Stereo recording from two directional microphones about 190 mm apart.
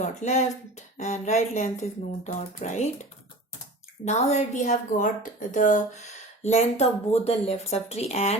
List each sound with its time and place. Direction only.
0.0 s a woman's voice: 35° left (ahead or behind)